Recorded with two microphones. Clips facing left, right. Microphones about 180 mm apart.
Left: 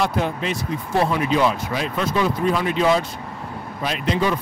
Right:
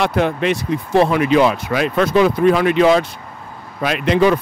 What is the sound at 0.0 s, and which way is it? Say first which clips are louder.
Speech: right 5 dB; 70° right (ahead or behind).